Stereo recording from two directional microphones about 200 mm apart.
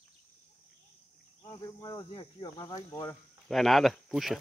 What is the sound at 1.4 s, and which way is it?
Speech, 20° left (ahead or behind).